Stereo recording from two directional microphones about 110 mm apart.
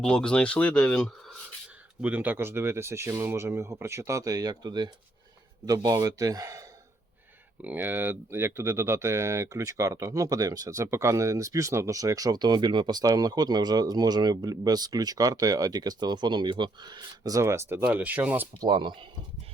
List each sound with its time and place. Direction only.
0.0 s speech: 5° left (ahead or behind)
2.0 s speech: 15° right (ahead or behind); by 6.7 s 30° right (ahead or behind)
7.6 s speech: 15° right (ahead or behind)
18.6 s speech: 45° right (ahead or behind)